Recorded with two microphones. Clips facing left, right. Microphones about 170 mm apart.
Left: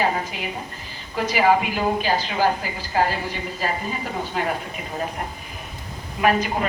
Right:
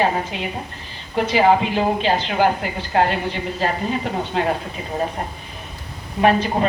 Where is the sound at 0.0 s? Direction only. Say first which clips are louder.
Right 3 dB; 25° right (ahead or behind).